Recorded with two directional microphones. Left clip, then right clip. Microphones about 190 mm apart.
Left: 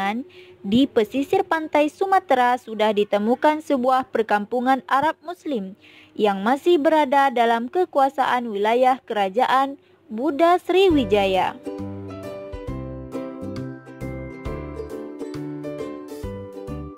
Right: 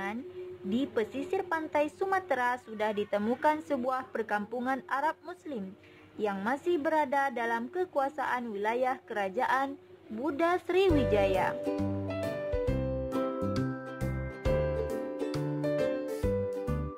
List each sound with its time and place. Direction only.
0.7 s a woman's voice: 40° left (ahead or behind)
11.6 s speech: centre (ahead or behind)
12.5 s music: centre (ahead or behind)
15.2 s music: centre (ahead or behind)